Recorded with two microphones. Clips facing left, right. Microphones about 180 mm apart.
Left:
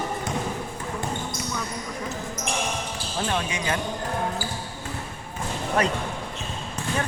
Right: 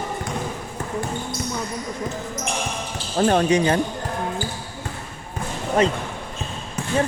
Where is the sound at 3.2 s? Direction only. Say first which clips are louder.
Right 11 dB; 45° right (ahead or behind).